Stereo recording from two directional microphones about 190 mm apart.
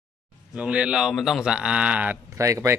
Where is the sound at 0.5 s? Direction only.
5° right (ahead or behind).